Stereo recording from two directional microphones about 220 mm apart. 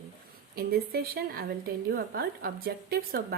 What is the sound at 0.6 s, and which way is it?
A woman's voice, 45° right (ahead or behind).